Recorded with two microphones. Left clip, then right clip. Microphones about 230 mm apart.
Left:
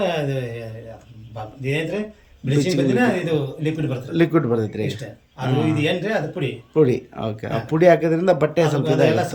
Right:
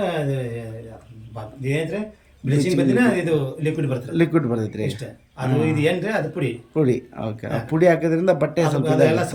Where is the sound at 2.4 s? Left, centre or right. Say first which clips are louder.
Even; centre.